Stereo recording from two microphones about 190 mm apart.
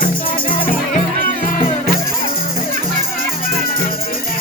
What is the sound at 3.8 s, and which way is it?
Music, 50° left (ahead or behind).